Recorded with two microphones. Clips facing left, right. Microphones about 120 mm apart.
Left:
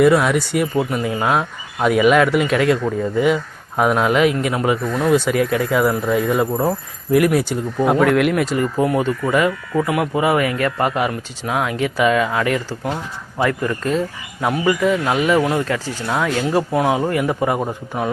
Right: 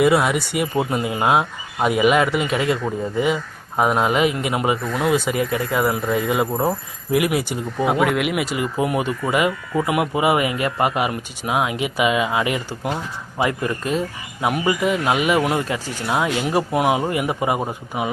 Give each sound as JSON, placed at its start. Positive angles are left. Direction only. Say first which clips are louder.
{"t": 0.0, "sound": "speech", "louder": "left 3 dB", "side_deg": -5}
{"t": 0.8, "sound": "speech", "louder": "left 1 dB", "side_deg": -30}
{"t": 1.0, "sound": "speech", "louder": "even", "side_deg": -10}